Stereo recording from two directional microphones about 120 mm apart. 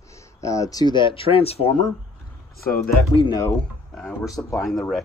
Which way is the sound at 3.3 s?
25° left (ahead or behind).